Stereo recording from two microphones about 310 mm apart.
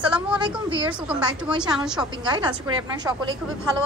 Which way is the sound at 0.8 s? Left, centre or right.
Centre.